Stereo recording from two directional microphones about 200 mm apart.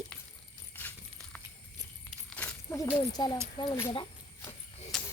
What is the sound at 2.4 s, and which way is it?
Speech, 10° left (ahead or behind).